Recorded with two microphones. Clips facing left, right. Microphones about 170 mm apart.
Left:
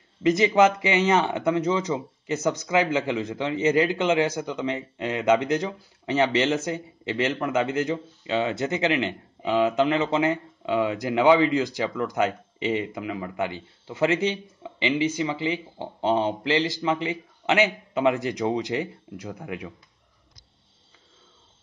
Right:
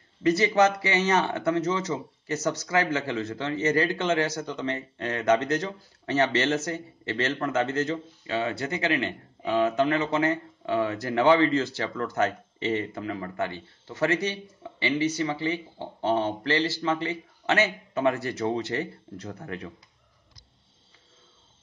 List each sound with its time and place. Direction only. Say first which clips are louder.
0.2 s speech: left 2 dB; 15° left (ahead or behind)